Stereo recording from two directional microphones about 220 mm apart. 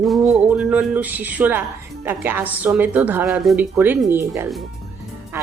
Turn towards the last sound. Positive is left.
turn(degrees=-10)  # may be behind; listen again after turning